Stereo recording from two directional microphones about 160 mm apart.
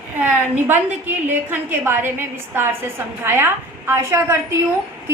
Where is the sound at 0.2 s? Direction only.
10° right (ahead or behind).